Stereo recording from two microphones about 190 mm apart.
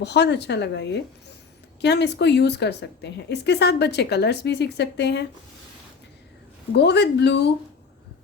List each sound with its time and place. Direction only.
0.0 s speech: 65° left (ahead or behind)
6.7 s speech: 65° left (ahead or behind)